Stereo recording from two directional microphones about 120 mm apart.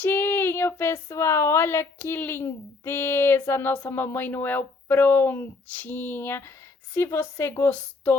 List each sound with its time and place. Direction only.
0.0 s female singing: 15° left (ahead or behind)
1.1 s a woman's voice: 25° left (ahead or behind)